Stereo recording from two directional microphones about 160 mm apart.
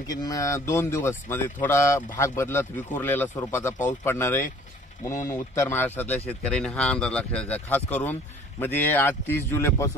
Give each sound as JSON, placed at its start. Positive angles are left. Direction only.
{"t": 0.1, "sound": "speech", "side_deg": 20}